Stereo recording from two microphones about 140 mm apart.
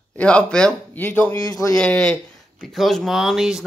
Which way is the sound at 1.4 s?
25° left (ahead or behind).